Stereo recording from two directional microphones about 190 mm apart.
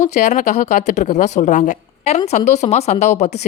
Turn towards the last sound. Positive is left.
turn(degrees=40)  # may be behind; listen again after turning